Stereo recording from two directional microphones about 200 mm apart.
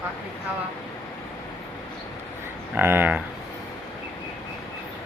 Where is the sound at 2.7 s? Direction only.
10° right (ahead or behind).